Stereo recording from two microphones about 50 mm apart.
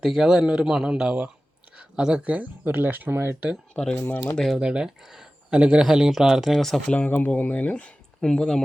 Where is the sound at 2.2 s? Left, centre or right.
Right.